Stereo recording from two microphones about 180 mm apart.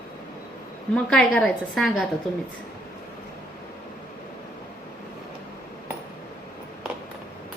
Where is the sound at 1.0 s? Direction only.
5° left (ahead or behind).